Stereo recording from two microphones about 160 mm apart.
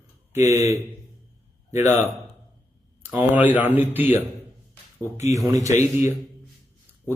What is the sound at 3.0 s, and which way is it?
Speech, 10° right (ahead or behind).